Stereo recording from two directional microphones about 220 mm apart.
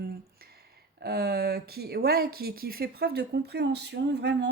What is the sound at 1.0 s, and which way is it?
A woman's voice, 45° right (ahead or behind).